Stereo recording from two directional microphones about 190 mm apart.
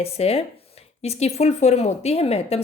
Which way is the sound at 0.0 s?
30° left (ahead or behind).